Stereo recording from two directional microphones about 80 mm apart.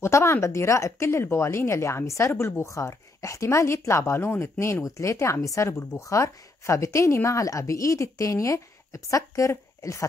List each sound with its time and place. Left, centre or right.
0.0 s speech: left